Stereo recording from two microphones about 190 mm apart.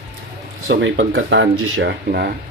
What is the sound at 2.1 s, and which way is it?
Speech, 55° right (ahead or behind).